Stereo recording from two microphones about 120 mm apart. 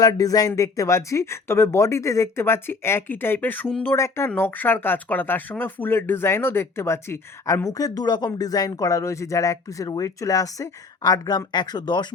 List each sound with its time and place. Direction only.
0.0 s speech: 30° left (ahead or behind)